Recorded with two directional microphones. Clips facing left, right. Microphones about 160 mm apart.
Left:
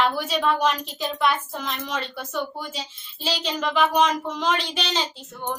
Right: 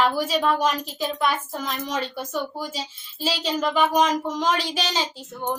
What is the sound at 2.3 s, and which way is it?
Speech, 35° right (ahead or behind).